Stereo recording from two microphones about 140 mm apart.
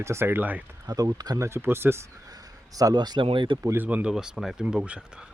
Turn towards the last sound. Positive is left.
turn(degrees=-5)  # may be behind; listen again after turning